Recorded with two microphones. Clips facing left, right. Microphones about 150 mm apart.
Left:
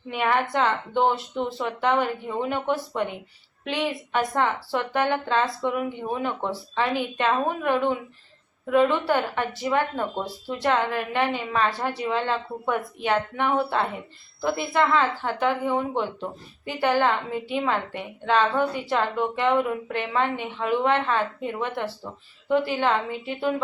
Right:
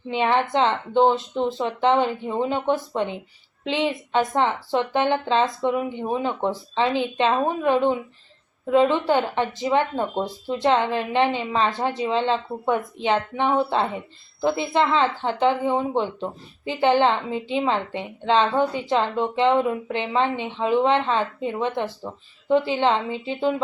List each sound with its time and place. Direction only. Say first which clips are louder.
0.1 s speech: right 3 dB; 25° right (ahead or behind)